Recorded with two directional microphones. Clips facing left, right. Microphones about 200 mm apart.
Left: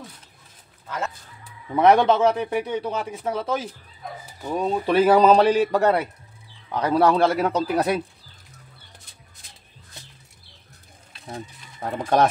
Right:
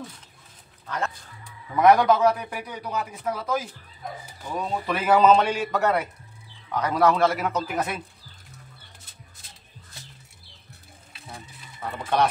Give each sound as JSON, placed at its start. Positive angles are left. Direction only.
{"t": 0.8, "sound": "speech", "side_deg": 5}
{"t": 1.8, "sound": "a man's voice", "side_deg": 30}
{"t": 4.8, "sound": "a man's voice", "side_deg": 35}
{"t": 11.3, "sound": "speech", "side_deg": 45}